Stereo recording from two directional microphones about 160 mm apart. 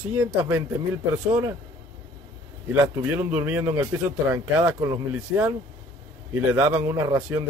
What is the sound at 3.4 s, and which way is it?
A man's voice, 10° right (ahead or behind).